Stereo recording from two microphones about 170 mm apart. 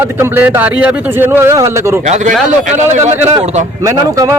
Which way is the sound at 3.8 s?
20° right (ahead or behind).